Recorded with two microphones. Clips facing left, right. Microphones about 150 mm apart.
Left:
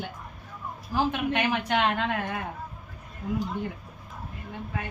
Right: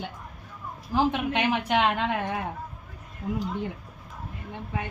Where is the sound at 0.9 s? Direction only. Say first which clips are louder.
Right 2 dB; 20° right (ahead or behind).